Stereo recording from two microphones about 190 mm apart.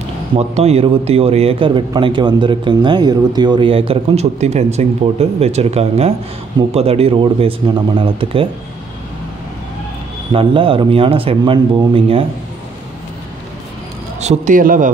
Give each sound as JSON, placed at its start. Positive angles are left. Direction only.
{"t": 0.4, "sound": "a man's voice", "side_deg": -35}
{"t": 10.3, "sound": "speech", "side_deg": -25}
{"t": 14.2, "sound": "a man's voice", "side_deg": -40}